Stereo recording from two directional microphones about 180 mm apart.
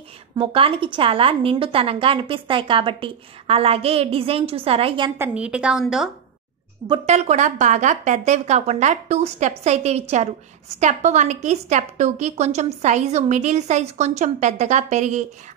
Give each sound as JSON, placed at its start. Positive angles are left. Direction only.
{"t": 0.4, "sound": "a woman's voice", "side_deg": -30}
{"t": 5.2, "sound": "a woman's voice", "side_deg": -5}
{"t": 7.1, "sound": "a woman's voice", "side_deg": -40}